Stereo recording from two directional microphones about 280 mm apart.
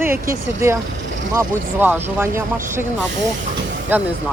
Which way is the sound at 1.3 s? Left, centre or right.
Centre.